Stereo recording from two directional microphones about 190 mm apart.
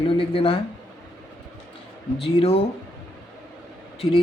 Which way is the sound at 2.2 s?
30° left (ahead or behind).